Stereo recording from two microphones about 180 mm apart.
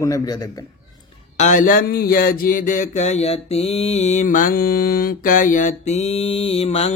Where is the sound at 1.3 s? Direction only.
45° left (ahead or behind).